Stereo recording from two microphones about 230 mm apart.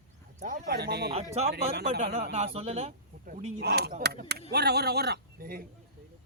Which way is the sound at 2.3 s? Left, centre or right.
Right.